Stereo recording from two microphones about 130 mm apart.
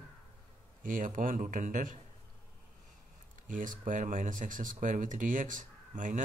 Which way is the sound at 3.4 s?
90° right.